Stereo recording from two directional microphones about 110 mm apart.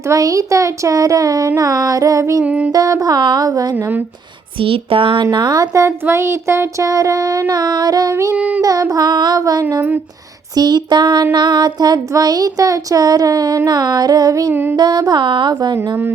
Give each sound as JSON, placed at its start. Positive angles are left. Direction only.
{"t": 0.1, "sound": "speech", "side_deg": -30}
{"t": 2.4, "sound": "mantra", "side_deg": -15}
{"t": 2.7, "sound": "speech", "side_deg": -35}
{"t": 4.6, "sound": "speech", "side_deg": -55}
{"t": 5.2, "sound": "speech", "side_deg": -40}
{"t": 8.4, "sound": "mantra", "side_deg": -15}
{"t": 8.6, "sound": "speech", "side_deg": -30}
{"t": 14.5, "sound": "music", "side_deg": -20}
{"t": 14.8, "sound": "speech", "side_deg": -40}